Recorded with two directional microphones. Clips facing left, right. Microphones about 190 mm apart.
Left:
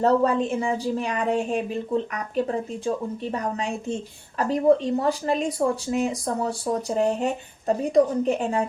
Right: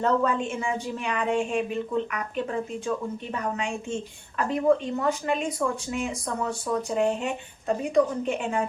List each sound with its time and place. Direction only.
0.0 s a woman's voice: 35° left (ahead or behind)